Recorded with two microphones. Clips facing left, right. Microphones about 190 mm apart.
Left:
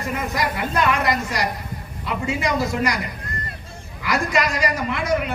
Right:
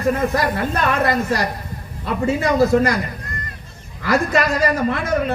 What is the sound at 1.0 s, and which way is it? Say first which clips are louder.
A woman's voice: right 4 dB; 55° right (ahead or behind).